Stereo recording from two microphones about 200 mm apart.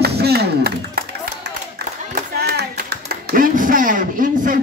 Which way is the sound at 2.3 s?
50° right (ahead or behind).